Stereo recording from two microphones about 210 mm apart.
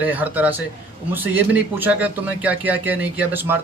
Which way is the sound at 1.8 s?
5° right (ahead or behind).